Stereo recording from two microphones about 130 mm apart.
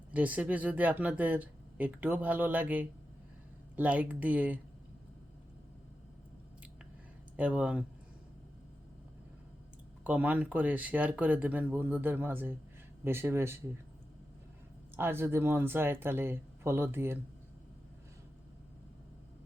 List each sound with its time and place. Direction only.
0.1 s speech: 10° right (ahead or behind)
7.3 s speech: 10° right (ahead or behind)
10.0 s speech: 10° right (ahead or behind)
14.9 s speech: 20° right (ahead or behind)